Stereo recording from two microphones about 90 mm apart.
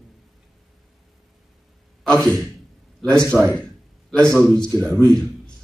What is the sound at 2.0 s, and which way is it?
A man's voice, 10° left (ahead or behind).